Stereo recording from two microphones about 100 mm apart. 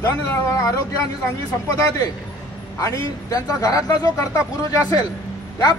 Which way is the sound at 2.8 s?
35° left (ahead or behind).